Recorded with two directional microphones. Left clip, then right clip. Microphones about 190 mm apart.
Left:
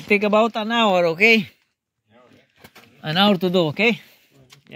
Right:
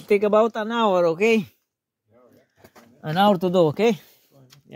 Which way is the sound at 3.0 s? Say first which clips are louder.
Even; 15° right (ahead or behind).